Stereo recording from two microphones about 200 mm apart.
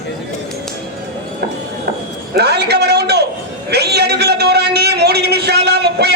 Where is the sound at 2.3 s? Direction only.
55° right (ahead or behind).